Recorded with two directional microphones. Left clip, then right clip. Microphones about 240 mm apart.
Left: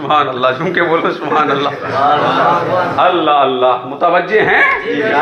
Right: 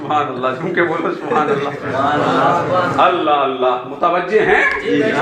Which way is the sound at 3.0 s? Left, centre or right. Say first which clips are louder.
Left 1 dB; left.